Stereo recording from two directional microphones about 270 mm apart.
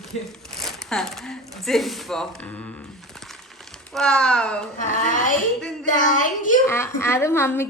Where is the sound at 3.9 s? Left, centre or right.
Centre.